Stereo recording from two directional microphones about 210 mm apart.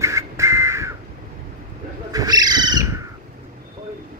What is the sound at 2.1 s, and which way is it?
Owl, 20° right (ahead or behind).